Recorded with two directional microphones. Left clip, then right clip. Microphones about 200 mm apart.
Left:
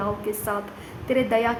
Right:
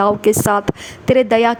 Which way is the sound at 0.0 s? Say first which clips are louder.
Right 14 dB; 50° right (ahead or behind).